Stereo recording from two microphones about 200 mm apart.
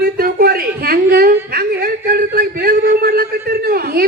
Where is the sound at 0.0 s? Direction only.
50° right (ahead or behind).